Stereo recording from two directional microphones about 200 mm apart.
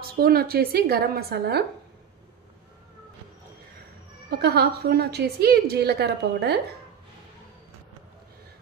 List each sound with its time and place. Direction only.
0.0 s a woman's voice: 50° right (ahead or behind)
4.3 s a woman's voice: 50° right (ahead or behind)